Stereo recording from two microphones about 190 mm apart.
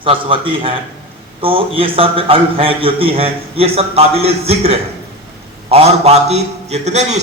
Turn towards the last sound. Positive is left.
turn(degrees=-35)  # may be behind; listen again after turning